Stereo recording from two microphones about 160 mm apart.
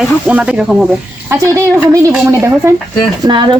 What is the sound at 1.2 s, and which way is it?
A woman's voice, 15° right (ahead or behind).